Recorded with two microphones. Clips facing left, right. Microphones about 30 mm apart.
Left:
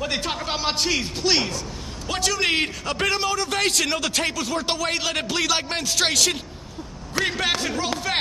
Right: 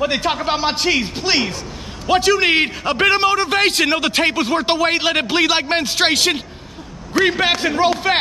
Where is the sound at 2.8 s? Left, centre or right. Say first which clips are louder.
Right 8 dB; right.